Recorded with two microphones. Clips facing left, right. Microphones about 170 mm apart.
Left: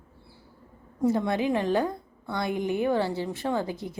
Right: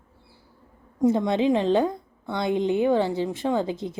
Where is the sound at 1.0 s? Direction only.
20° right (ahead or behind).